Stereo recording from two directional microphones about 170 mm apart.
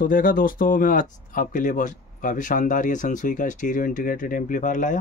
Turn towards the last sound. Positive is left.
turn(degrees=50)  # may be behind; listen again after turning